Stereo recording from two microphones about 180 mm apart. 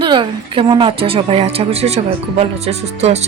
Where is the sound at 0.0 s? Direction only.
25° right (ahead or behind).